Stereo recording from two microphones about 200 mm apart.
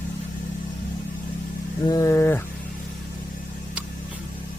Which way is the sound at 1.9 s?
15° left (ahead or behind).